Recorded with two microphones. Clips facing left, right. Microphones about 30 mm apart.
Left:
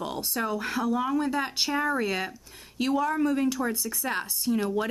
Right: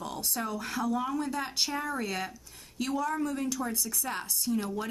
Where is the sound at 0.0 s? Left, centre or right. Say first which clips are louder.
Left 4 dB; left.